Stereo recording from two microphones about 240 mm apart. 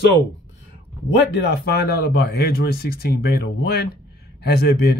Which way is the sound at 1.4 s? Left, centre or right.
Left.